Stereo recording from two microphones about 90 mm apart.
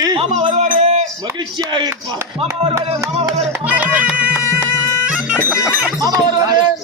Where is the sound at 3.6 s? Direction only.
15° right (ahead or behind).